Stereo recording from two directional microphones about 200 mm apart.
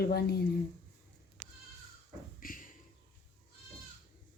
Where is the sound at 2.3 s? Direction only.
45° left (ahead or behind).